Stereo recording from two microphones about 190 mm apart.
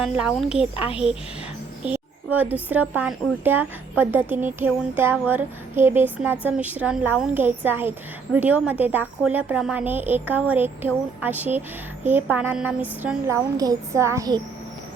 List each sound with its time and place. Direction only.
0.0 s a woman's voice: centre (ahead or behind); by 14.4 s 20° right (ahead or behind)